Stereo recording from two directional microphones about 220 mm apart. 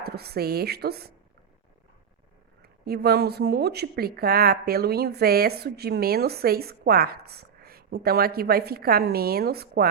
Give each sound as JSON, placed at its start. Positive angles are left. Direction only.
{"t": 0.0, "sound": "a woman's voice", "side_deg": -45}
{"t": 2.6, "sound": "speech", "side_deg": -45}